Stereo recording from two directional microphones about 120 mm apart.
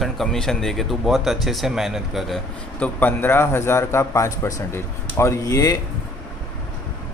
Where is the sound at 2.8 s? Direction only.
15° left (ahead or behind).